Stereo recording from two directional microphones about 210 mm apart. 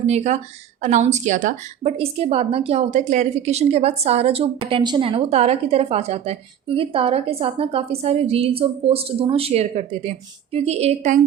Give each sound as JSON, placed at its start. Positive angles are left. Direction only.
{"t": 0.1, "sound": "a woman's voice", "side_deg": -30}